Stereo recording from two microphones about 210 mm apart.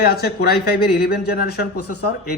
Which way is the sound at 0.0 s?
50° left (ahead or behind).